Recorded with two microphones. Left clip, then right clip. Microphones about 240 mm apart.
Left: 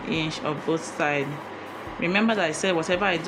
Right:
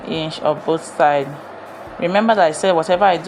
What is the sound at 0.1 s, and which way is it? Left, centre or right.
Speech, centre.